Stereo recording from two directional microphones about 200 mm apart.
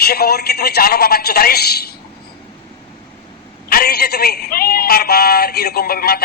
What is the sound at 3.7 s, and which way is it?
A man's voice, 50° left (ahead or behind).